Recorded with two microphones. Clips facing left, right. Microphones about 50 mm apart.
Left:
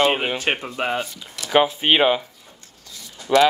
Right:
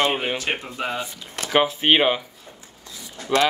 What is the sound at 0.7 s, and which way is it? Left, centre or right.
Speech, left.